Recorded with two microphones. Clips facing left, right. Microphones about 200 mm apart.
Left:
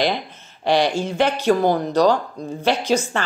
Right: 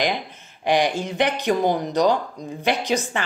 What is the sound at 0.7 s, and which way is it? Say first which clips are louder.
A woman's voice: left 2 dB; 15° right (ahead or behind).